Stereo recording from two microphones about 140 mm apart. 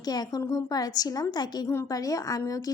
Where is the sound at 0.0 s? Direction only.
30° left (ahead or behind).